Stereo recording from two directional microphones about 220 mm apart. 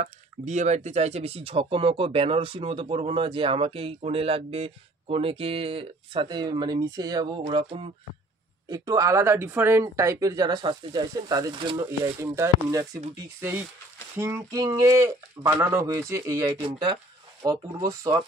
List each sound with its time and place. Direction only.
0.0 s speech: 30° right (ahead or behind); by 18.2 s 15° right (ahead or behind)